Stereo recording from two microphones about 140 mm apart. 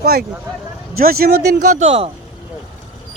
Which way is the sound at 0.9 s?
90° right.